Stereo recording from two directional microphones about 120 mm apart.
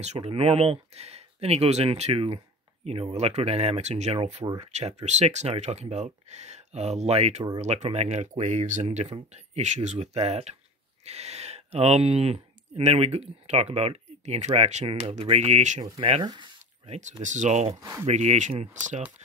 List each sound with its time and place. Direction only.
0.0 s speech: 60° right (ahead or behind)
14.9 s speech: 50° right (ahead or behind); by 15.8 s 75° right (ahead or behind)
16.2 s speech: 40° right (ahead or behind)
16.8 s speech: 75° right (ahead or behind)